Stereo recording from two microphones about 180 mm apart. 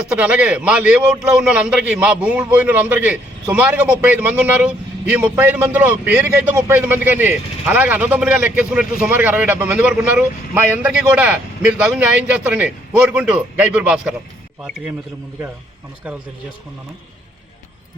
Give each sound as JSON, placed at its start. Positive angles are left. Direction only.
{"t": 0.1, "sound": "a man's voice", "side_deg": -5}
{"t": 16.1, "sound": "a man's voice", "side_deg": -5}